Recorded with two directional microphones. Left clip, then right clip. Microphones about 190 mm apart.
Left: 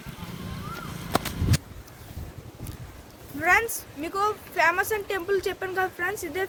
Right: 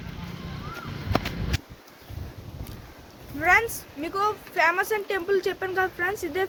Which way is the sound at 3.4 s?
5° right (ahead or behind).